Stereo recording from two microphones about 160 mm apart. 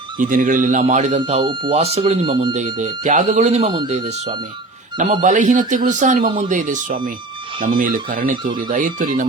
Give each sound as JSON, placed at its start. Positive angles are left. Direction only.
{"t": 0.2, "sound": "speech", "side_deg": -55}